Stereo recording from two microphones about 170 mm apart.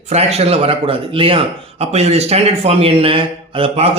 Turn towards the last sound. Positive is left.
turn(degrees=-35)  # may be behind; listen again after turning